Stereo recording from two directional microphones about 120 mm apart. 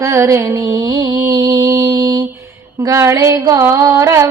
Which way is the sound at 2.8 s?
30° right (ahead or behind).